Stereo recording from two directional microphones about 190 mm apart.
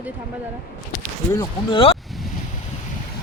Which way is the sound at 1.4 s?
25° left (ahead or behind).